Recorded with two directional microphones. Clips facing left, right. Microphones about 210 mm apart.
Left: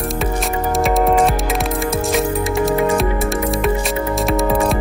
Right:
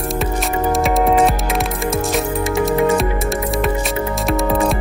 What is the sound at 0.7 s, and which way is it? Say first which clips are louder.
Music: even; centre (ahead or behind).